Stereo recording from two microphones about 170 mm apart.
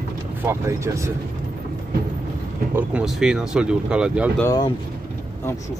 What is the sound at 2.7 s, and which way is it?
Speech, 5° right (ahead or behind).